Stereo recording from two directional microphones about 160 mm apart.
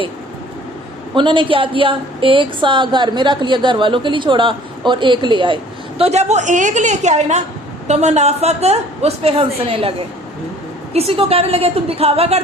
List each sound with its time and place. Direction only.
1.1 s speech: 30° right (ahead or behind)
6.0 s a woman's voice: 45° right (ahead or behind)
10.9 s speech: 40° right (ahead or behind)